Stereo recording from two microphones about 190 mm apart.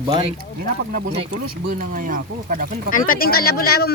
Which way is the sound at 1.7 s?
45° right (ahead or behind).